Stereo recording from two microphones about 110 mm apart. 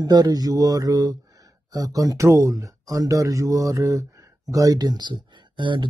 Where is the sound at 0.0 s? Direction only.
35° right (ahead or behind).